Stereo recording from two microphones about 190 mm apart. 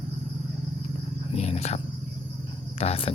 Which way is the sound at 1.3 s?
35° left (ahead or behind).